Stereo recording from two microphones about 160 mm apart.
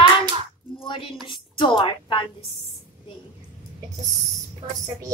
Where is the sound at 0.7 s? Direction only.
35° left (ahead or behind).